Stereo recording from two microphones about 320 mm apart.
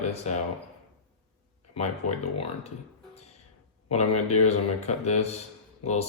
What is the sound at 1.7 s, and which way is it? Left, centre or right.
Speech, centre.